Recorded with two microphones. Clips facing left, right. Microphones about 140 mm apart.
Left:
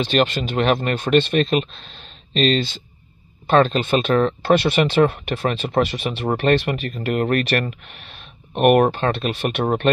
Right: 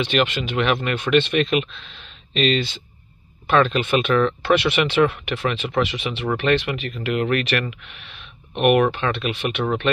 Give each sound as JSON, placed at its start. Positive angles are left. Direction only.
{"t": 0.0, "sound": "speech", "side_deg": 35}